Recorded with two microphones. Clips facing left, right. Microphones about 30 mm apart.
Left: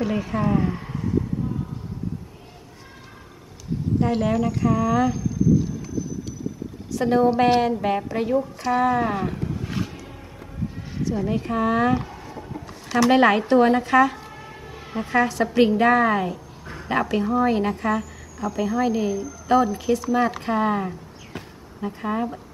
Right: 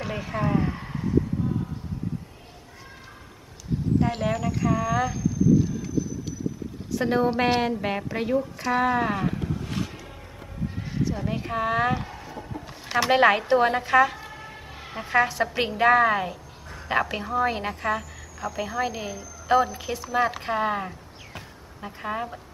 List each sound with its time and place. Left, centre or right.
0.0 s speech: centre
4.0 s a woman's voice: centre
6.9 s a woman's voice: centre
9.3 s roaring cats: centre
11.0 s speech: centre
12.8 s a sound: right
13.1 s a woman's voice: centre